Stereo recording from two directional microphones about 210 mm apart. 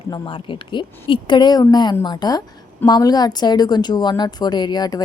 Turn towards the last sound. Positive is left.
turn(degrees=20)  # may be behind; listen again after turning